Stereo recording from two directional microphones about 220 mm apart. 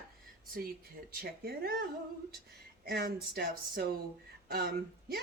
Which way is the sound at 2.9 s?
45° right (ahead or behind).